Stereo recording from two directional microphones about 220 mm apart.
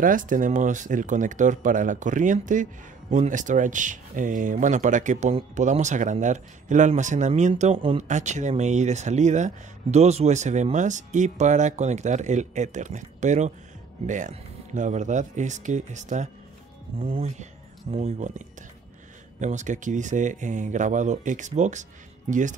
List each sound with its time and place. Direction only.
0.0 s speech: 35° right (ahead or behind)
19.4 s speech: 35° right (ahead or behind)